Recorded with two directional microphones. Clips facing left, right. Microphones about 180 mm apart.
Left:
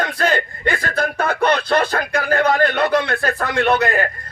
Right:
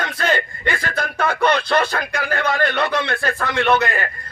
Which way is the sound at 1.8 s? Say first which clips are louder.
Left 2 dB; 50° left (ahead or behind).